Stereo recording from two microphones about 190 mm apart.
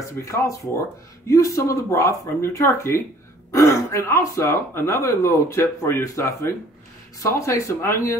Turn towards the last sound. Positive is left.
turn(degrees=15)  # may be behind; listen again after turning